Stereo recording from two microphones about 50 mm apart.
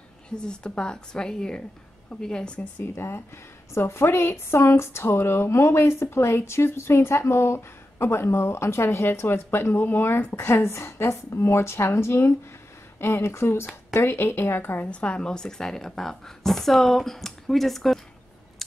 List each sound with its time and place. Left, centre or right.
0.5 s a woman's voice: centre
2.8 s a woman's voice: left
3.7 s a woman's voice: left
13.9 s a woman's voice: left
14.9 s a woman's voice: left; by 18.0 s centre